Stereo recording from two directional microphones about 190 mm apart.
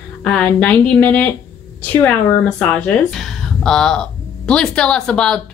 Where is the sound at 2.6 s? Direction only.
10° left (ahead or behind).